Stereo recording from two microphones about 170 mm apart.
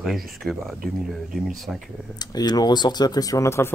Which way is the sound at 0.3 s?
Centre (ahead or behind).